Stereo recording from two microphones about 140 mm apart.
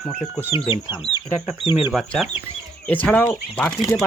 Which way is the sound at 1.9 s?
5° right (ahead or behind).